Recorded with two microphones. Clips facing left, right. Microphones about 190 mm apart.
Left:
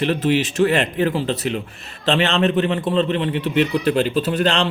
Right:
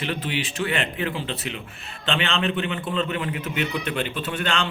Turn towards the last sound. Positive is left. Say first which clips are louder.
# left 8 dB
turn(degrees=35)  # may be behind; listen again after turning